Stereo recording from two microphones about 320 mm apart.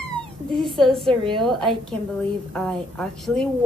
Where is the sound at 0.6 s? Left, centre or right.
Centre.